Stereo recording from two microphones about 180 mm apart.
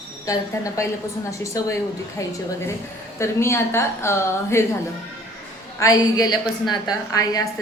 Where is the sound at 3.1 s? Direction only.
15° left (ahead or behind).